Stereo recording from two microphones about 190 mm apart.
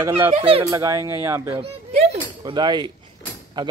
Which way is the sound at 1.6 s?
30° right (ahead or behind).